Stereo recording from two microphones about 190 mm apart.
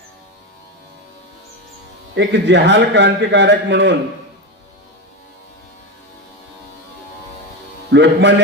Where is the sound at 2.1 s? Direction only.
65° right (ahead or behind).